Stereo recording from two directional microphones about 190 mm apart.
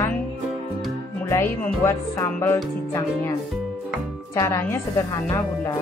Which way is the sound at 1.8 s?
15° left (ahead or behind).